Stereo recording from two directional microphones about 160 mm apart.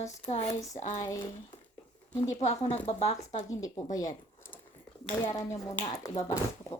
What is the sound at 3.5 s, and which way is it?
Speech, 20° left (ahead or behind).